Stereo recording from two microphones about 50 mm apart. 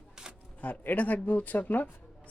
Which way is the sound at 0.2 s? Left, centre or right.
Centre.